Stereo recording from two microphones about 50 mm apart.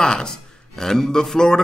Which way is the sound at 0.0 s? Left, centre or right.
Centre.